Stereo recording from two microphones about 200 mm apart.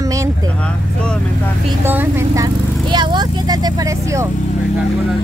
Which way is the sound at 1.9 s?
10° right (ahead or behind).